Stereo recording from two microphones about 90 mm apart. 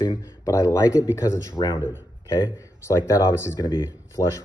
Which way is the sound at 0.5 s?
40° left (ahead or behind).